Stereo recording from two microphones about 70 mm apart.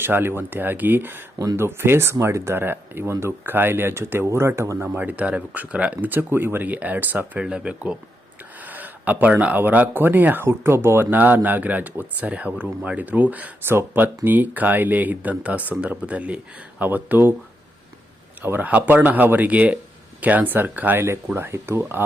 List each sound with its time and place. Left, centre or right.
0.0 s speech: right
2.6 s speech: right
4.9 s speech: right
7.4 s speech: centre; by 17.3 s right
18.4 s speech: right